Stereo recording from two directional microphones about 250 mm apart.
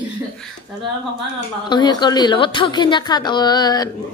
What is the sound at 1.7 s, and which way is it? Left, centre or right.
A woman's voice, centre.